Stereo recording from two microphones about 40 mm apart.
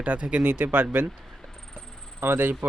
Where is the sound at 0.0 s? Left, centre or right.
Right.